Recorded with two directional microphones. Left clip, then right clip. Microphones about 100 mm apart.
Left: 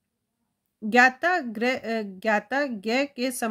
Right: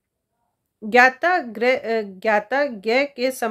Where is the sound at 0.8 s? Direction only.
30° left (ahead or behind).